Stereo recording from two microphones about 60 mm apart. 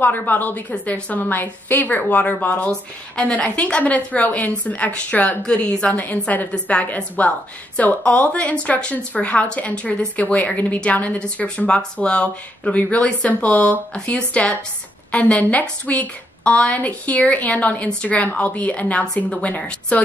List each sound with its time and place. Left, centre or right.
0.0 s a woman's voice: left
5.4 s a woman's voice: centre